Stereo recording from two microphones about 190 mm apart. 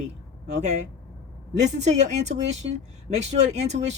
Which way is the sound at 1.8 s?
40° right (ahead or behind).